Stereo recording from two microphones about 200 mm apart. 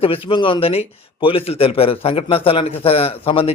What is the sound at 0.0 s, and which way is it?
Speech, 25° left (ahead or behind).